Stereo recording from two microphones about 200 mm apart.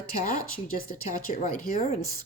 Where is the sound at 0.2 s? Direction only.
40° left (ahead or behind).